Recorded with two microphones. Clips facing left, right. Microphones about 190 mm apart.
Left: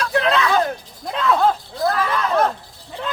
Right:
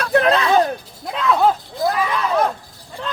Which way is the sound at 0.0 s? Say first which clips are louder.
Right 4 dB; 50° right (ahead or behind).